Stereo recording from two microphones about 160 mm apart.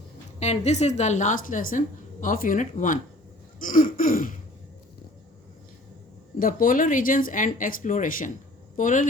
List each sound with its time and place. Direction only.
0.3 s a woman's voice: 45° left (ahead or behind)
6.4 s speech: 60° left (ahead or behind)